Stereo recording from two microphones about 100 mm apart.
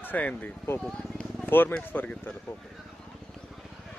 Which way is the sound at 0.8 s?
5° left (ahead or behind).